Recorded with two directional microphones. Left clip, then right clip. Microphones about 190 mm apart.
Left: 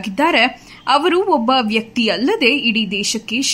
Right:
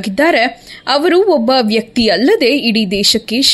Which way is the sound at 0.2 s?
15° right (ahead or behind).